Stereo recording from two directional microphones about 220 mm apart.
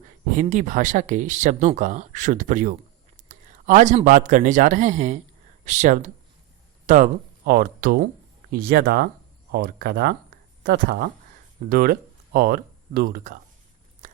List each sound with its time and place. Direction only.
0.3 s a man's voice: 35° right (ahead or behind)
14.0 s biting: 35° right (ahead or behind)